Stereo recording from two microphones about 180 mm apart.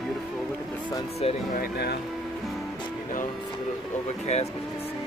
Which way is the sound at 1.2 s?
35° left (ahead or behind).